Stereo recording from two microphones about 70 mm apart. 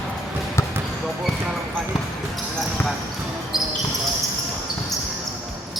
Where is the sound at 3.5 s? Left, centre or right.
Centre.